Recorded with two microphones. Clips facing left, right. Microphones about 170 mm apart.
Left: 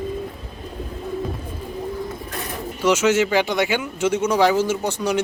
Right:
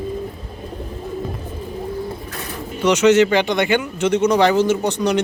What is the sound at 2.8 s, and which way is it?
Speech, 5° left (ahead or behind).